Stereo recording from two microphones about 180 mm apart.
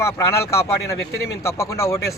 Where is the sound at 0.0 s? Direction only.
15° left (ahead or behind).